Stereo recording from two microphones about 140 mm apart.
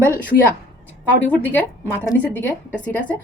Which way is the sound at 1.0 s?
10° left (ahead or behind).